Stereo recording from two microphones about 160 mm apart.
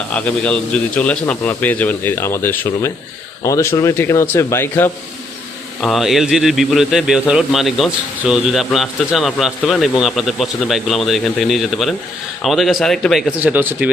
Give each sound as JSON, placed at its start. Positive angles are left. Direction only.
{"t": 0.1, "sound": "a man's voice", "side_deg": 10}
{"t": 5.8, "sound": "speech", "side_deg": 0}
{"t": 13.4, "sound": "speech", "side_deg": -10}